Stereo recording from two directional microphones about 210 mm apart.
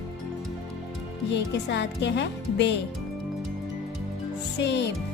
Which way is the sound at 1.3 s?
55° left (ahead or behind).